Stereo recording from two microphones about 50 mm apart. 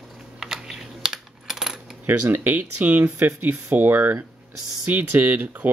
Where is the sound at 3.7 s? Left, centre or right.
Right.